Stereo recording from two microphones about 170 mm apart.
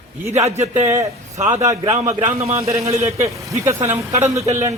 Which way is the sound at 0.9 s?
15° right (ahead or behind).